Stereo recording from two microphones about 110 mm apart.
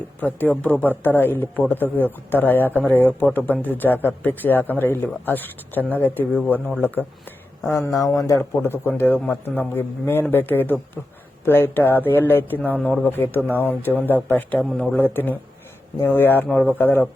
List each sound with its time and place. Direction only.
0.2 s speech: 15° left (ahead or behind)
13.1 s speech: 20° left (ahead or behind)
14.6 s speech: centre (ahead or behind)
14.9 s speech: 15° left (ahead or behind)